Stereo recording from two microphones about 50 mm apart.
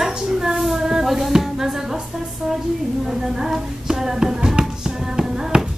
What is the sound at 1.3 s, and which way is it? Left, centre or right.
A woman's voice, centre.